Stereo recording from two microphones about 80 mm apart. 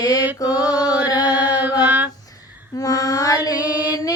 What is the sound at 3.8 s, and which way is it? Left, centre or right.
Music, left.